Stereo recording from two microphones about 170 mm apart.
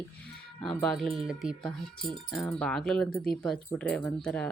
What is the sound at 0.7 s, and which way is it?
Speech, centre (ahead or behind).